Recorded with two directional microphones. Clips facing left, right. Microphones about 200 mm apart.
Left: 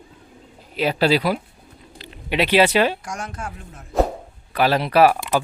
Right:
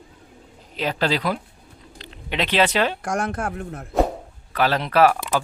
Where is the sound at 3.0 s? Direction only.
55° right (ahead or behind).